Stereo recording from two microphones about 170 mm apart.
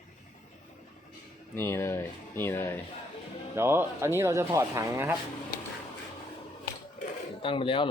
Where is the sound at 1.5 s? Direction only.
15° left (ahead or behind).